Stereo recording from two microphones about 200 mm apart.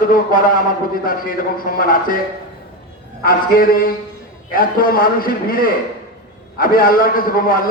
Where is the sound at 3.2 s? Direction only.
45° left (ahead or behind).